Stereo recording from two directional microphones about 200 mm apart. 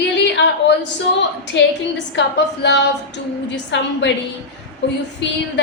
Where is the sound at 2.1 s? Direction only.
60° left (ahead or behind).